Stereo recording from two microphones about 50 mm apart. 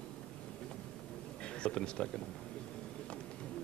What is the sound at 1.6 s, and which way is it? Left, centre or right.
Speech, centre.